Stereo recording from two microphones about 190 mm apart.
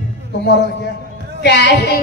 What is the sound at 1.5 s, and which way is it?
Child singing, 65° left (ahead or behind).